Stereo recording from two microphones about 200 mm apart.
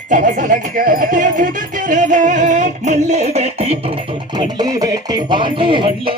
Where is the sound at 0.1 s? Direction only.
40° right (ahead or behind).